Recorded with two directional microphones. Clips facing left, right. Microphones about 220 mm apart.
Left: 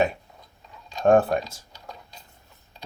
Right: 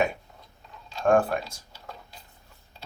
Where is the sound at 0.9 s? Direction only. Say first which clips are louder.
Left 3 dB; 20° left (ahead or behind).